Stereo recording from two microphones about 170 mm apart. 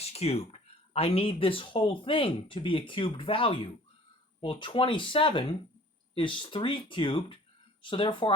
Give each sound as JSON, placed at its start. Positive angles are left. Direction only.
{"t": 0.0, "sound": "speech", "side_deg": 35}